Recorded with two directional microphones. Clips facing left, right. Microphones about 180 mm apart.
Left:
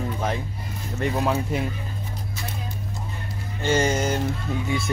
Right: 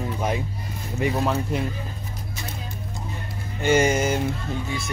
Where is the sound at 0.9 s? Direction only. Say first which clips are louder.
Even; 5° right (ahead or behind).